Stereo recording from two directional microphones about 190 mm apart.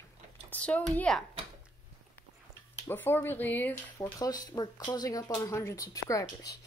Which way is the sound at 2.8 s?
10° left (ahead or behind).